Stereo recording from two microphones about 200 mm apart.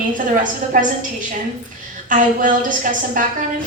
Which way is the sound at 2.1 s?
40° right (ahead or behind).